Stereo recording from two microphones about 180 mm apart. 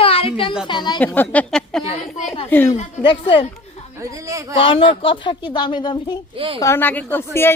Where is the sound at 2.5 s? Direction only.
10° left (ahead or behind).